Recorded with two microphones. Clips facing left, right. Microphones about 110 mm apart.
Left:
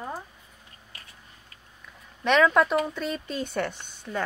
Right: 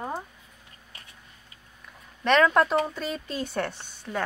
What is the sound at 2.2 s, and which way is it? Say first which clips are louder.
A woman's voice: even; centre (ahead or behind).